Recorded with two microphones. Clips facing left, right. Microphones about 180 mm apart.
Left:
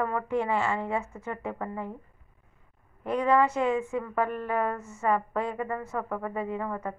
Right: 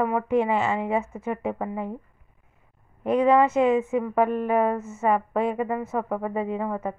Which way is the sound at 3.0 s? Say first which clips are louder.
Right 5 dB; 20° right (ahead or behind).